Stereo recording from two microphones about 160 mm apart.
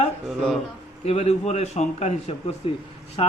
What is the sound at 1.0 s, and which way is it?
Speech, 40° left (ahead or behind).